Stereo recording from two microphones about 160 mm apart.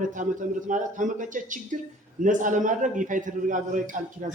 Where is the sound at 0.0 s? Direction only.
55° right (ahead or behind).